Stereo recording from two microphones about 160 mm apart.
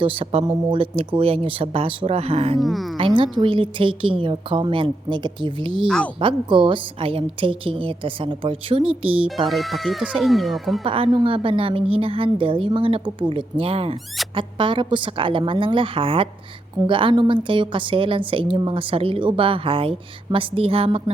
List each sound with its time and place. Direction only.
0.0 s a woman's voice: 35° right (ahead or behind)
2.6 s speech: centre (ahead or behind)
3.0 s a woman's voice: 30° right (ahead or behind)
9.5 s speech: centre (ahead or behind)
10.8 s a woman's voice: 35° right (ahead or behind)